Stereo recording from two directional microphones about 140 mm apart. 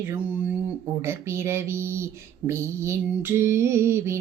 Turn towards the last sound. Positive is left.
turn(degrees=-20)  # may be behind; listen again after turning